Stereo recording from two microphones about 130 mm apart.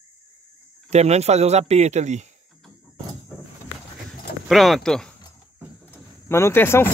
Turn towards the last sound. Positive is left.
turn(degrees=15)  # may be behind; listen again after turning